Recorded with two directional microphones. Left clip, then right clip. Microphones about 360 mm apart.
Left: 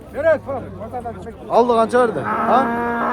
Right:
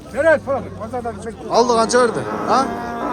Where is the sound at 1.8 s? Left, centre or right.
Centre.